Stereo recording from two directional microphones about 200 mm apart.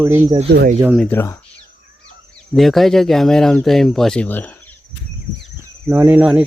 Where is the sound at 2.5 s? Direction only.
Centre (ahead or behind).